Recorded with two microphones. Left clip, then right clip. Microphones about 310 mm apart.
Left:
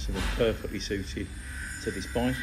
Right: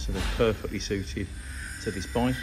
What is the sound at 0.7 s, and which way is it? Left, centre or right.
Speech, centre.